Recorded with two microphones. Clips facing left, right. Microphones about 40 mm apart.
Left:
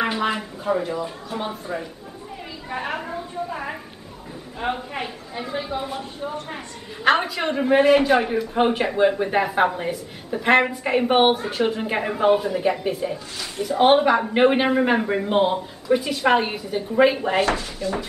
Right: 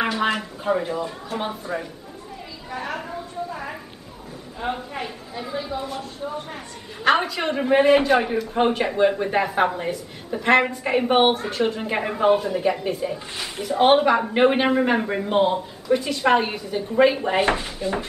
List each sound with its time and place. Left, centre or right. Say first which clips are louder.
0.7 s speech: even; centre
2.7 s a woman's voice: left 2 dB; left
3.4 s a sound: left 2 dB; centre
4.6 s a woman's voice: left 1 dB; centre
7.1 s speech: even; centre
17.4 s speech: even; right